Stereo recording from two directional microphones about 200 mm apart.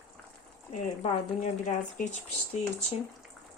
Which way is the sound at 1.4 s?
35° left (ahead or behind).